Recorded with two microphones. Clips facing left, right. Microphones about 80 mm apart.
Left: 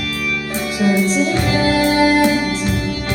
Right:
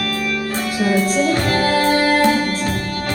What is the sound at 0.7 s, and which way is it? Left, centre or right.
Music, right.